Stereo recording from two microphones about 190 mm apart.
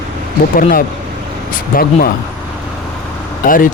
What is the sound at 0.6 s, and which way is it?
Speech, 45° left (ahead or behind).